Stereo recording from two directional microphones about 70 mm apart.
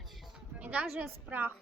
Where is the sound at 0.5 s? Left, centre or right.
Centre.